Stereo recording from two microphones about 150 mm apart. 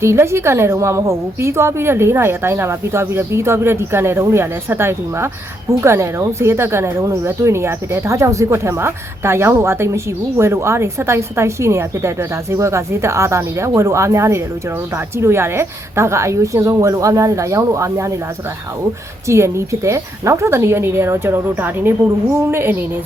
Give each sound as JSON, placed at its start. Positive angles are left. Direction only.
{"t": 0.0, "sound": "a woman's voice", "side_deg": -20}
{"t": 19.3, "sound": "speech", "side_deg": -20}